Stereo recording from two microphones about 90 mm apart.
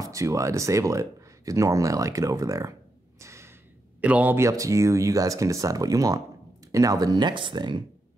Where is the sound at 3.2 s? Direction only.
30° right (ahead or behind).